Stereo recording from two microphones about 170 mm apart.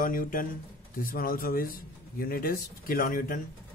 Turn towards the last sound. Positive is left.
turn(degrees=55)  # may be behind; listen again after turning